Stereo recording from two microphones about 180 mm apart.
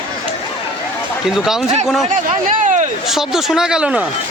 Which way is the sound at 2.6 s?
45° right (ahead or behind).